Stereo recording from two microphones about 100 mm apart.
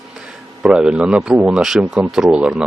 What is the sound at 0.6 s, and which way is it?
Speech, 10° right (ahead or behind).